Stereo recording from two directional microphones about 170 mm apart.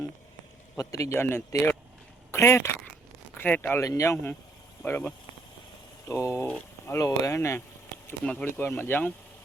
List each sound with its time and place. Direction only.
0.8 s speech: 20° left (ahead or behind)